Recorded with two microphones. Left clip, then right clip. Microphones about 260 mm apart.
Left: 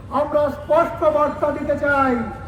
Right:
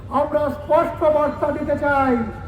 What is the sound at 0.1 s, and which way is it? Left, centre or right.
A man's voice, right.